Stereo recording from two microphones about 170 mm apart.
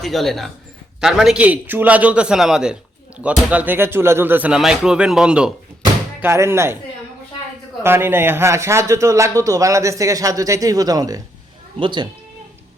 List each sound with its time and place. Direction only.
0.0 s a man's voice: centre (ahead or behind); by 6.7 s 15° right (ahead or behind)
7.8 s a man's voice: 15° right (ahead or behind)